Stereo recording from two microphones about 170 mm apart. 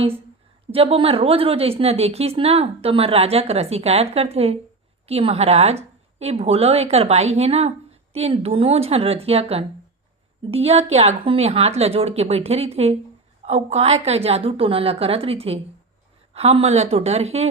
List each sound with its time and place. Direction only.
0.7 s a woman's voice: 35° right (ahead or behind)